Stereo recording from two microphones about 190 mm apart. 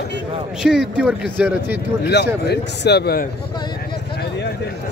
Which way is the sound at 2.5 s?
60° left (ahead or behind).